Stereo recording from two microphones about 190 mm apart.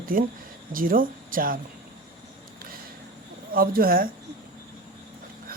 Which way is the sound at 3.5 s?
50° right (ahead or behind).